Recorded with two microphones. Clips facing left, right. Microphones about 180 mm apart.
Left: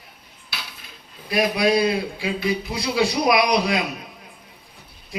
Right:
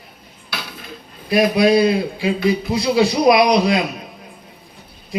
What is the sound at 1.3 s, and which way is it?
A man's voice, 25° right (ahead or behind).